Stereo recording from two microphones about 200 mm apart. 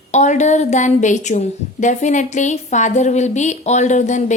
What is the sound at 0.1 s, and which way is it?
A woman's voice, 35° left (ahead or behind).